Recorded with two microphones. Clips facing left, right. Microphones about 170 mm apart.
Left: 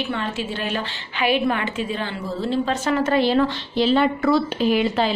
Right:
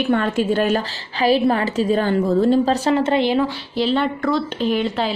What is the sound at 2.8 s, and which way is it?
Speech, 25° right (ahead or behind).